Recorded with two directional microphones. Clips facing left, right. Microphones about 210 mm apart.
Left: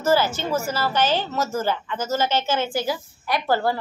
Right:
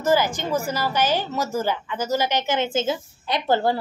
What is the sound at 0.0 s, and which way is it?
A woman's voice, 15° right (ahead or behind).